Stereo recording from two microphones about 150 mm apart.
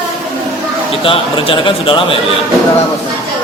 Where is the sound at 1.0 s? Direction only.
35° left (ahead or behind).